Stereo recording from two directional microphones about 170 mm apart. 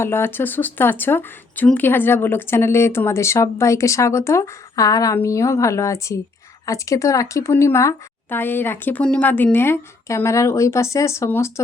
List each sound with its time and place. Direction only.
0.0 s speech: 15° left (ahead or behind)